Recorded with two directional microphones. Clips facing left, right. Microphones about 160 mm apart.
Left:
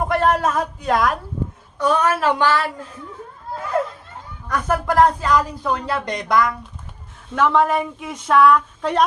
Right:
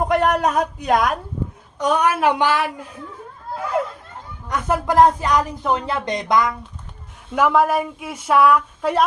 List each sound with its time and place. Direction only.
0.0 s speech: 15° right (ahead or behind)
4.4 s speech: 20° right (ahead or behind)
7.3 s speech: 10° right (ahead or behind)